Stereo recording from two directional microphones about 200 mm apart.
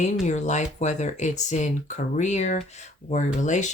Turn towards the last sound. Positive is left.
turn(degrees=35)  # may be behind; listen again after turning